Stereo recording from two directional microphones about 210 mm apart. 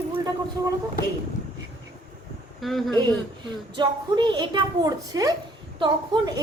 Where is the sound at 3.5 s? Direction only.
20° right (ahead or behind).